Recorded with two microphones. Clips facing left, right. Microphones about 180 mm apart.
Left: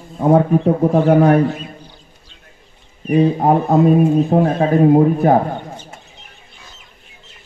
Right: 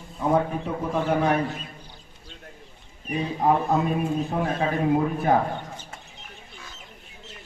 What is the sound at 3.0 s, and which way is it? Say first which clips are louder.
Speech: left 14 dB; 55° left (ahead or behind).